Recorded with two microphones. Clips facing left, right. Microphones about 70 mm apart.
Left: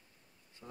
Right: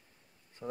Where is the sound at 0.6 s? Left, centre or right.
Right.